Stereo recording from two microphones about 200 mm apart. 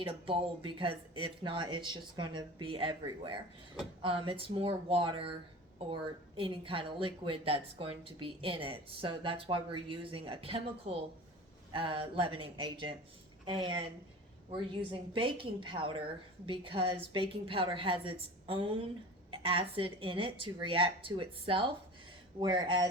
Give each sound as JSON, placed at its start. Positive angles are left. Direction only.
{"t": 0.0, "sound": "a woman's voice", "side_deg": -25}
{"t": 15.1, "sound": "a woman's voice", "side_deg": -25}